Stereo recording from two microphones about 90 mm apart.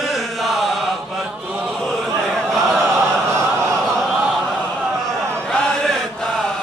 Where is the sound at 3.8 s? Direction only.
Centre (ahead or behind).